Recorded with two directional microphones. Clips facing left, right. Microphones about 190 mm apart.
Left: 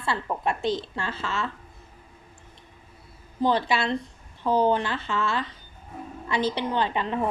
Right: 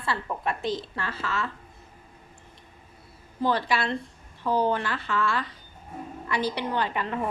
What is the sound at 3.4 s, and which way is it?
A woman's voice, 20° left (ahead or behind).